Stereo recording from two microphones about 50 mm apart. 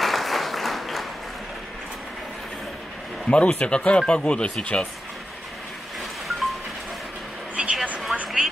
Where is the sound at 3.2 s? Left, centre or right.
Left.